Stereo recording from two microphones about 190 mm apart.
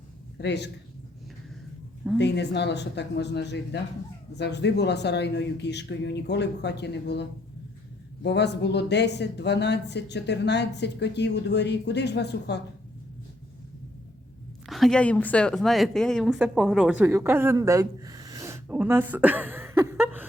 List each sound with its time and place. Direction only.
0.4 s speech: 60° left (ahead or behind)
2.1 s speech: 65° left (ahead or behind)
8.2 s speech: 65° left (ahead or behind)
14.7 s a woman's voice: centre (ahead or behind)